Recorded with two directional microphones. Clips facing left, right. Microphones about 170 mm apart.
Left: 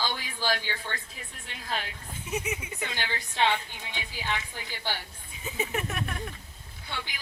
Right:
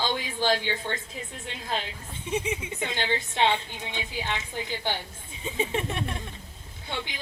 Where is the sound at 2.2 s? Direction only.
30° right (ahead or behind).